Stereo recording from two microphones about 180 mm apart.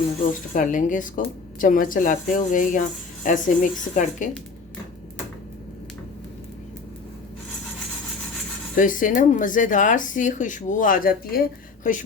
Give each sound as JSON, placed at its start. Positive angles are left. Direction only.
{"t": 0.3, "sound": "speech", "side_deg": 45}
{"t": 8.7, "sound": "speech", "side_deg": 50}